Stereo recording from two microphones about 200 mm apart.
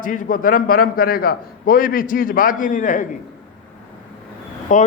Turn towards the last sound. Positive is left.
turn(degrees=40)  # may be behind; listen again after turning